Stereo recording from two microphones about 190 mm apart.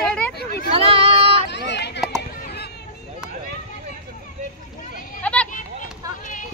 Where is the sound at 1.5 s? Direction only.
65° left (ahead or behind).